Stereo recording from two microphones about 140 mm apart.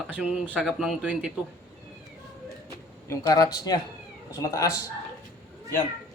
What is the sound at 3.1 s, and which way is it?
Speech, 25° left (ahead or behind).